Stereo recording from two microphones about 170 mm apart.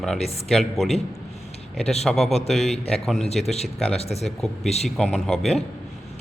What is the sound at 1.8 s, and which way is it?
Speech, 40° left (ahead or behind).